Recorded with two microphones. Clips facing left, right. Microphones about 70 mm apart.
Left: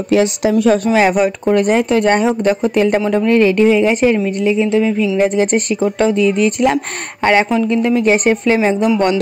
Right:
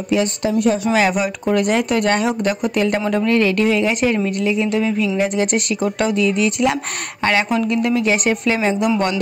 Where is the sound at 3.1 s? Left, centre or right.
Centre.